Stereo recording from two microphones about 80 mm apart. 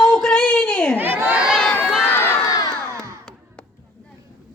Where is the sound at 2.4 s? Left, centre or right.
Left.